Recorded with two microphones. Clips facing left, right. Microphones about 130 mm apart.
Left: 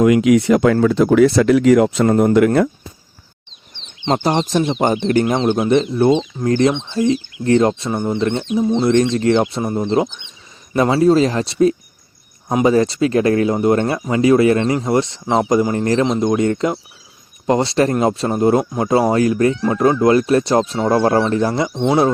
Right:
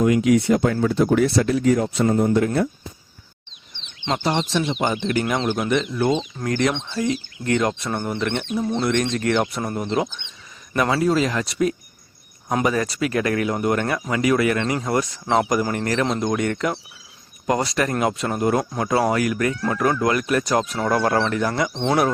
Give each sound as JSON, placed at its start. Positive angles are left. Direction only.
{"t": 0.0, "sound": "speech", "side_deg": 90}
{"t": 4.0, "sound": "speech", "side_deg": 40}
{"t": 7.7, "sound": "speech", "side_deg": 20}
{"t": 21.7, "sound": "speech", "side_deg": 10}